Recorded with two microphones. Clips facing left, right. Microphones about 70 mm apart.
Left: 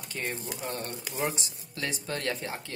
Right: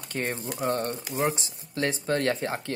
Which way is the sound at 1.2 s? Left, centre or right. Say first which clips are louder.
Right 4 dB; right.